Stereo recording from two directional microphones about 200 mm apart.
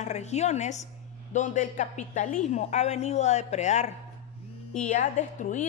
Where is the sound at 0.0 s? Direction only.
35° left (ahead or behind).